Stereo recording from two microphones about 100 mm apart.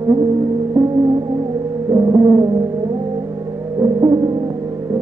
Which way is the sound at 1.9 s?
40° right (ahead or behind).